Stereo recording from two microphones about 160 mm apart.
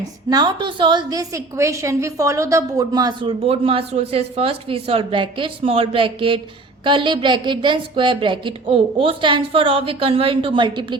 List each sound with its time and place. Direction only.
0.3 s a woman's voice: 25° right (ahead or behind)